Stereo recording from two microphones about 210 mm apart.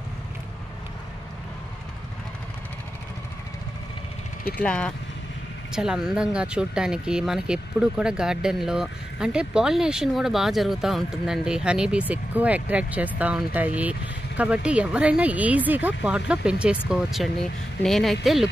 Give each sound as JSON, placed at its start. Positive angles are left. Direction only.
{"t": 4.6, "sound": "speech", "side_deg": 5}